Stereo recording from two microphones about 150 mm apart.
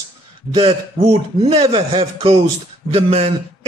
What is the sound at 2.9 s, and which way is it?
Speech, 40° right (ahead or behind).